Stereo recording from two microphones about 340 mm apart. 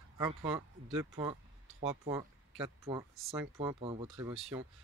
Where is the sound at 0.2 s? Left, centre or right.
Centre.